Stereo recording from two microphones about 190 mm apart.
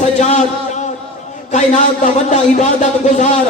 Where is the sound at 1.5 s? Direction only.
40° left (ahead or behind).